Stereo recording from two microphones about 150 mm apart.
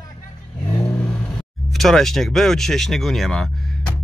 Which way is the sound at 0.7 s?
25° left (ahead or behind).